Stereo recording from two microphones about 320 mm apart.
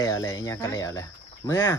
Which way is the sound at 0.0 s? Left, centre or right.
Centre.